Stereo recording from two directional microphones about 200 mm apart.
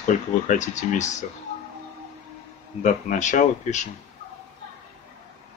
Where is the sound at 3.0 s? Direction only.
40° left (ahead or behind).